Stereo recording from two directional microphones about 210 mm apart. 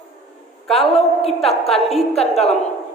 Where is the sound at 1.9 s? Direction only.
30° left (ahead or behind).